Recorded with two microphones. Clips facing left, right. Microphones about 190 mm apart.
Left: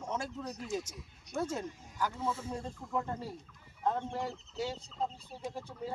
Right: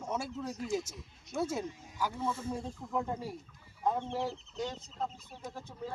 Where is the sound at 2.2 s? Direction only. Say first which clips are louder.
Right 1 dB; 5° left (ahead or behind).